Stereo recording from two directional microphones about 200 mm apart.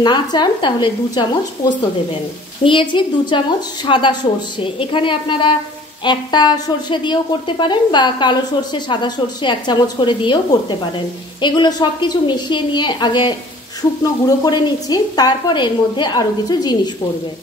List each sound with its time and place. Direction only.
0.0 s a woman's voice: 20° left (ahead or behind)
2.6 s a woman's voice: 25° left (ahead or behind)